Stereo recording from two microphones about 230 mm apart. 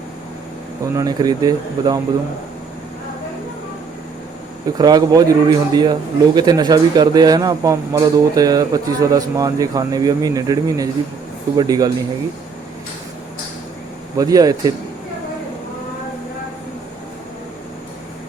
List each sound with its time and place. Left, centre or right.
0.9 s speech: centre
4.8 s speech: centre
14.2 s speech: centre